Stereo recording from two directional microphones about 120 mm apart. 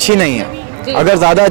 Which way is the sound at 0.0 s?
15° right (ahead or behind).